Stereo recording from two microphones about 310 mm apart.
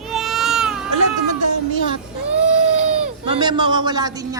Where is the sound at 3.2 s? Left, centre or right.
Centre.